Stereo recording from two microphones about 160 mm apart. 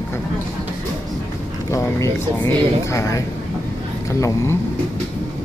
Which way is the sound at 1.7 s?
20° left (ahead or behind).